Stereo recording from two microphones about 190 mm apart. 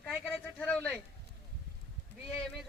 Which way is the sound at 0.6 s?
5° left (ahead or behind).